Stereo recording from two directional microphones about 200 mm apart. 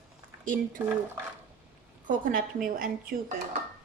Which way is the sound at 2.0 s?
45° right (ahead or behind).